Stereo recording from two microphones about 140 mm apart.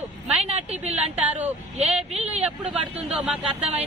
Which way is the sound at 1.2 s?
10° right (ahead or behind).